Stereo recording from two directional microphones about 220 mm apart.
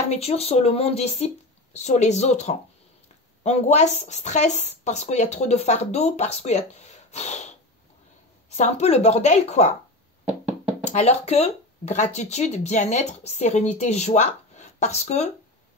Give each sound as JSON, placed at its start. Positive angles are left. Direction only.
{"t": 0.1, "sound": "speech", "side_deg": 25}
{"t": 8.5, "sound": "speech", "side_deg": 30}
{"t": 10.9, "sound": "speech", "side_deg": 30}